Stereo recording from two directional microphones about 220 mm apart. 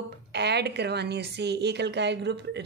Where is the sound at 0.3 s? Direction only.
50° right (ahead or behind).